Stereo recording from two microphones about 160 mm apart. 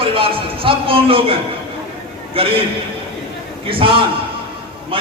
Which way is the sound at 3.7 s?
35° right (ahead or behind).